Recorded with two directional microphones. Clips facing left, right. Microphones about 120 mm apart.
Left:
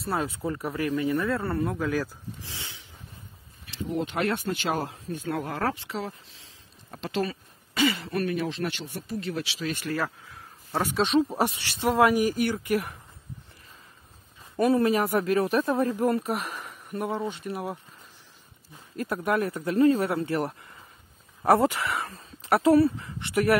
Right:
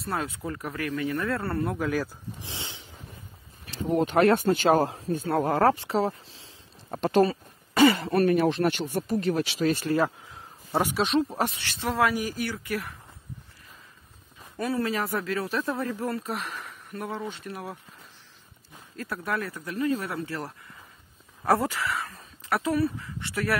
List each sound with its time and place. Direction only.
0.0 s a man's voice: 5° left (ahead or behind)
0.7 s a man's voice: 15° left (ahead or behind)
1.8 s speech: 10° right (ahead or behind)
2.4 s snort: 25° right (ahead or behind)
3.6 s speech: 45° right (ahead or behind)
6.9 s speech: 45° right (ahead or behind)
9.9 s a sound: 20° right (ahead or behind)
11.1 s a man's voice: centre (ahead or behind)
11.4 s speech: 15° left (ahead or behind)
14.6 s speech: 20° left (ahead or behind)
18.9 s speech: 20° left (ahead or behind)